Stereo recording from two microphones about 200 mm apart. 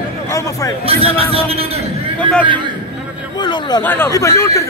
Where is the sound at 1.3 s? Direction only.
30° right (ahead or behind).